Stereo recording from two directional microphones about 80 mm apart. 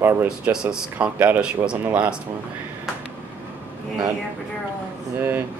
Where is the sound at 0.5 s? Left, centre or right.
Centre.